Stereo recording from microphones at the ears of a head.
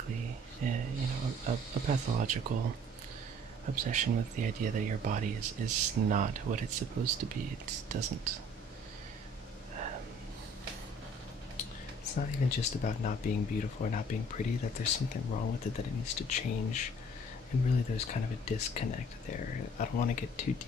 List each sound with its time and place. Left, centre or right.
0.1 s snake: right
3.6 s speech: right
11.5 s speech: left